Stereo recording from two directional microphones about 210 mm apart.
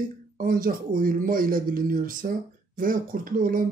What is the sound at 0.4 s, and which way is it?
Speech, 40° right (ahead or behind).